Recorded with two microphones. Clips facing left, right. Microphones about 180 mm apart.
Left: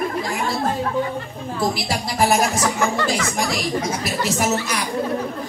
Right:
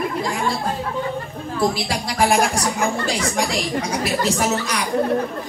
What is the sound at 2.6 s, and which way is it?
Music, 80° left.